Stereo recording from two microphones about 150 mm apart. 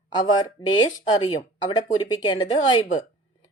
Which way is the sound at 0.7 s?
35° left (ahead or behind).